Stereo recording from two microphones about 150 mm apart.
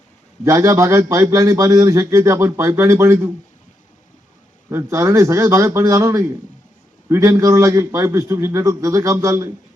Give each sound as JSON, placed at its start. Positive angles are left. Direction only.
{"t": 0.4, "sound": "a man's voice", "side_deg": -20}
{"t": 4.7, "sound": "a man's voice", "side_deg": -20}